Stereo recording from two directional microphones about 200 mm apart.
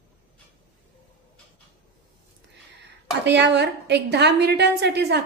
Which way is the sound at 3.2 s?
60° right (ahead or behind).